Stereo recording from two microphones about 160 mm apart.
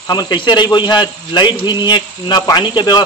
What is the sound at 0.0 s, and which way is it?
A man's voice, 25° left (ahead or behind).